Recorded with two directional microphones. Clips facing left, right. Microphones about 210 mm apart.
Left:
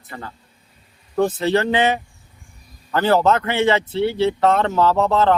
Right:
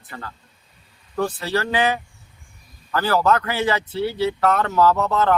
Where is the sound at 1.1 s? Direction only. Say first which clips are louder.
Left 5 dB; 20° left (ahead or behind).